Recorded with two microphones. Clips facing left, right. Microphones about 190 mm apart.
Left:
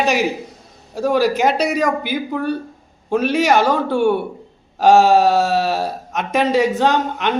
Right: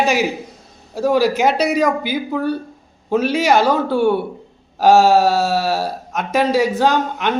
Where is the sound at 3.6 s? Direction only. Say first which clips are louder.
Right 1 dB; 15° left (ahead or behind).